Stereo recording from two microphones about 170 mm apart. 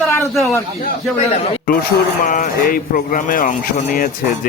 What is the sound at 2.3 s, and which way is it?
A man's voice, 50° left (ahead or behind).